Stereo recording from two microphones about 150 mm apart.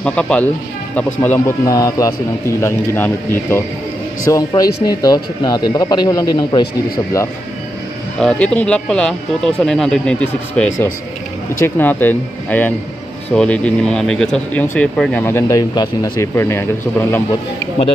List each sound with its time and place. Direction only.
0.0 s speech: 5° left (ahead or behind); by 6.6 s 30° left (ahead or behind)
8.2 s speech: 5° left (ahead or behind)